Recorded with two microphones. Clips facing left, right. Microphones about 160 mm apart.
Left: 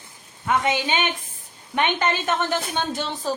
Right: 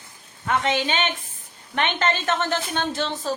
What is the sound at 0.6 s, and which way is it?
A woman's voice, 15° left (ahead or behind).